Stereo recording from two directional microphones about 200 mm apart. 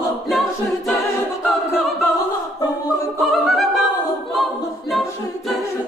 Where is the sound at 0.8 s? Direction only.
Centre (ahead or behind).